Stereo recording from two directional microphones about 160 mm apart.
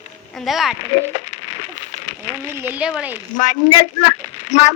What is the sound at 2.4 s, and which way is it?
Speech, 15° right (ahead or behind).